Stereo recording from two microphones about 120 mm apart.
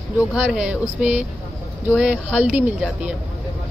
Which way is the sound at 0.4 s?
10° right (ahead or behind).